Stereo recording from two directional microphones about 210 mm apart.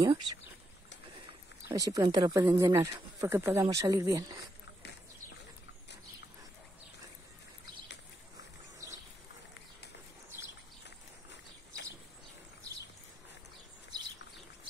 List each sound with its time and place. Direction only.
0.0 s speech: 20° right (ahead or behind)
1.7 s speech: 15° right (ahead or behind)